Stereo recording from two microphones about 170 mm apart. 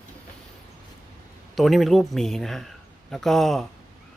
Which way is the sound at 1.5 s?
Centre (ahead or behind).